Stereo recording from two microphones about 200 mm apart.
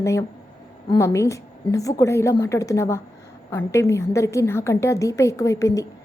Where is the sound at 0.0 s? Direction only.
15° left (ahead or behind).